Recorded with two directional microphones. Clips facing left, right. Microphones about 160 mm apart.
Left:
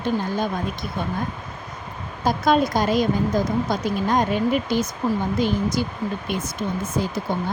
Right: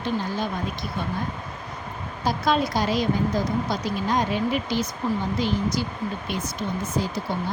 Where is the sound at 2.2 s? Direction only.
50° left (ahead or behind).